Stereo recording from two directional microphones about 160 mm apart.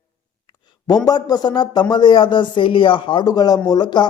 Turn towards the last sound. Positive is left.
turn(degrees=25)  # may be behind; listen again after turning